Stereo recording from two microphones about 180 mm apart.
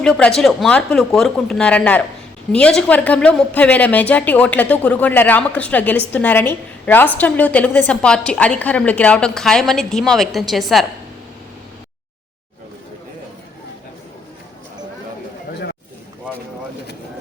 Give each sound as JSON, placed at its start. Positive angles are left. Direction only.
{"t": 0.0, "sound": "a woman's voice", "side_deg": 5}